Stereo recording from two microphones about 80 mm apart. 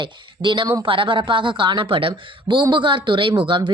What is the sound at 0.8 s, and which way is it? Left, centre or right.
Speech, right.